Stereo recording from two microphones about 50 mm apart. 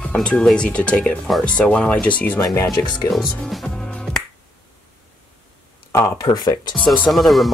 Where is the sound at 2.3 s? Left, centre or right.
Left.